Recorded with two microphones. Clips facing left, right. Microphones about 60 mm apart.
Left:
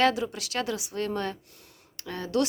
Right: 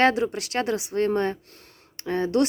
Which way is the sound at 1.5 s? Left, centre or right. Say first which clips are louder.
Right 4 dB; right.